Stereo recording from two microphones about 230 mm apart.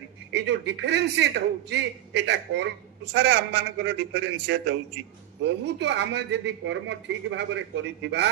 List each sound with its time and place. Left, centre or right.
0.3 s a man's voice: right